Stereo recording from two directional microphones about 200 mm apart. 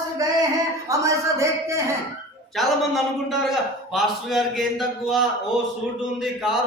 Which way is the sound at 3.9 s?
Centre (ahead or behind).